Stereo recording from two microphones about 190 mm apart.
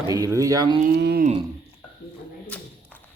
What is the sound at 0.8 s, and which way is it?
Speech, 60° right (ahead or behind).